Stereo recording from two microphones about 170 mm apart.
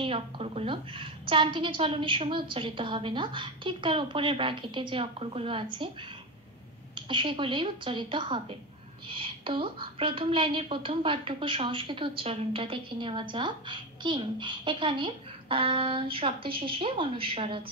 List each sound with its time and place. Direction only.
0.0 s a woman's voice: 35° right (ahead or behind)
7.0 s a woman's voice: 30° right (ahead or behind)